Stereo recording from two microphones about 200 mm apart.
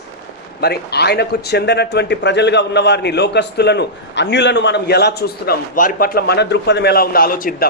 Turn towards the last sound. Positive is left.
turn(degrees=45)  # may be behind; listen again after turning